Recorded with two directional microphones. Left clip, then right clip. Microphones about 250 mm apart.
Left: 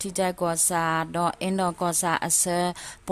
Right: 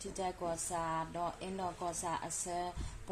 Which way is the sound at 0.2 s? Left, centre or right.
Left.